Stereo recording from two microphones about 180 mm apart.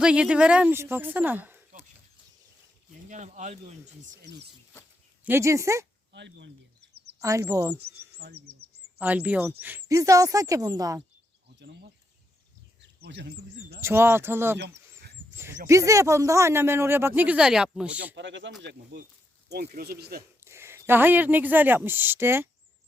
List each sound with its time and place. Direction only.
0.0 s speech: 5° right (ahead or behind)
3.1 s speech: 45° right (ahead or behind)
5.2 s speech: 15° right (ahead or behind)
6.1 s speech: 75° right (ahead or behind)
7.2 s speech: 15° right (ahead or behind)
8.2 s speech: 60° right (ahead or behind)
9.0 s speech: 10° right (ahead or behind)
11.6 s speech: 70° right (ahead or behind)
13.8 s speech: 15° right (ahead or behind)
14.6 s a sound: 70° right (ahead or behind)
15.6 s speech: 15° right (ahead or behind)
18.1 s speech: 85° right
19.5 s speech: 60° right (ahead or behind)
20.4 s speech: 15° right (ahead or behind)